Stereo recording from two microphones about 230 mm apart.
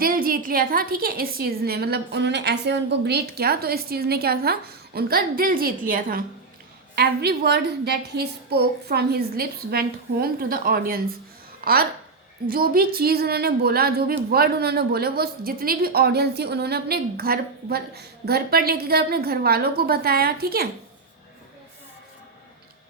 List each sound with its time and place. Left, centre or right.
0.0 s a woman's voice: right